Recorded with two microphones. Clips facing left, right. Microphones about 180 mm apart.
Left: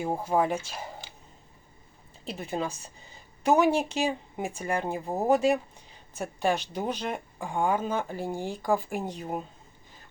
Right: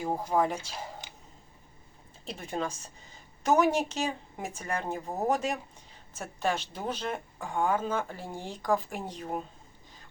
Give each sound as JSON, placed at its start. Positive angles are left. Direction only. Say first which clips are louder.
{"t": 0.0, "sound": "a woman's voice", "louder": "left 2 dB", "side_deg": 10}
{"t": 1.0, "sound": "a sound", "louder": "even", "side_deg": -20}
{"t": 2.2, "sound": "a woman's voice", "louder": "left 2 dB", "side_deg": 5}